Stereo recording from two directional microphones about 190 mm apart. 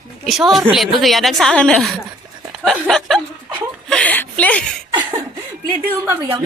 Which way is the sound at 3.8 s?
5° left (ahead or behind).